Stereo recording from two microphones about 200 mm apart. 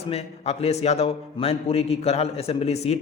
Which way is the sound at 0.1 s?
30° left (ahead or behind).